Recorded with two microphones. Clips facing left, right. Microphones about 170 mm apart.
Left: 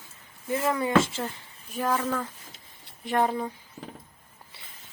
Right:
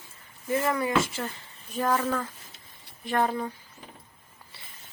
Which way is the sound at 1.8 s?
Centre (ahead or behind).